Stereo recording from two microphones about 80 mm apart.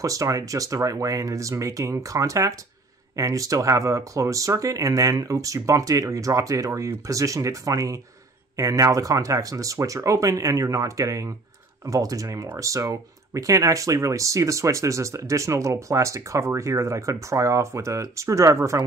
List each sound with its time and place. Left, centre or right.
0.0 s speech: right